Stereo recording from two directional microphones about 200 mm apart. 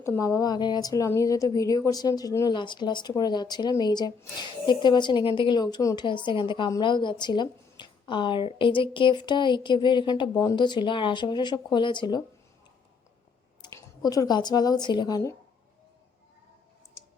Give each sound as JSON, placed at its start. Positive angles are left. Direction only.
{"t": 0.0, "sound": "speech", "side_deg": 15}
{"t": 13.6, "sound": "speech", "side_deg": 15}